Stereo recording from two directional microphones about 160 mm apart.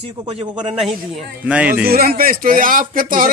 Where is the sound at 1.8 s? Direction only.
70° right (ahead or behind).